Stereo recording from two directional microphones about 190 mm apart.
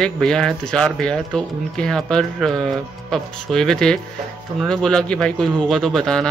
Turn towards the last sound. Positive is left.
turn(degrees=5)  # may be behind; listen again after turning